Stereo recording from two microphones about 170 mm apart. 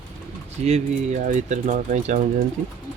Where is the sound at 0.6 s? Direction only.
40° right (ahead or behind).